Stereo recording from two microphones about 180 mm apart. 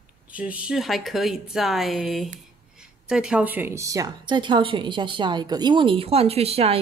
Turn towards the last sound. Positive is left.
turn(degrees=-35)  # may be behind; listen again after turning